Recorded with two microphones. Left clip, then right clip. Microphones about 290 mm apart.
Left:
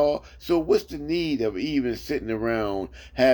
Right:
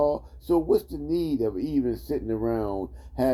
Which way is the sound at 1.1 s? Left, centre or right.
Left.